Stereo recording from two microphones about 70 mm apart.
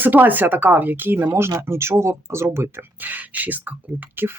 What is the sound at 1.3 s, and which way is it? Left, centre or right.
Speech, right.